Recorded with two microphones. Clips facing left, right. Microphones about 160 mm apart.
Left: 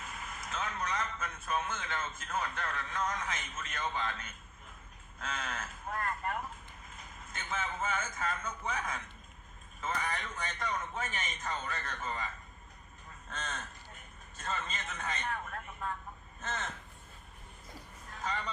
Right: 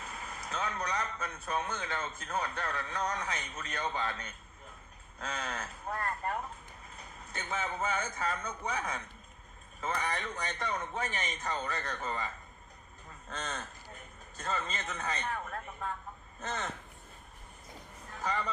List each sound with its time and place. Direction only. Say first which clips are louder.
0.0 s a man's voice: right 1 dB; 35° right (ahead or behind)
13.3 s speech: right 2 dB; 35° right (ahead or behind)
18.2 s speech: right 3 dB; 40° right (ahead or behind)